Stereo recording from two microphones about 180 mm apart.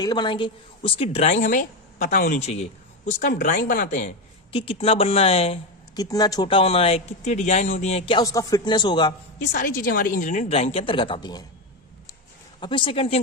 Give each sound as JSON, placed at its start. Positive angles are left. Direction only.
{"t": 0.0, "sound": "a woman's voice", "side_deg": 25}
{"t": 4.5, "sound": "a woman's voice", "side_deg": 30}
{"t": 6.0, "sound": "a woman's voice", "side_deg": 20}
{"t": 8.2, "sound": "speech", "side_deg": 20}
{"t": 9.5, "sound": "speech", "side_deg": 50}
{"t": 12.5, "sound": "speech", "side_deg": 25}